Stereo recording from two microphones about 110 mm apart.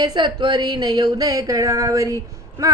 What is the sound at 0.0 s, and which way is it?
Music, 40° right (ahead or behind).